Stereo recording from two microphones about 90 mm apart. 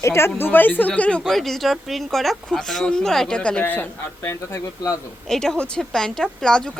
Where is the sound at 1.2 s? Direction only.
5° left (ahead or behind); by 4.9 s 30° left (ahead or behind).